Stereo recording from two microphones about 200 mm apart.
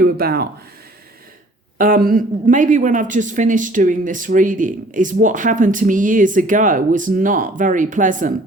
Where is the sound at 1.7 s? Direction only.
45° right (ahead or behind).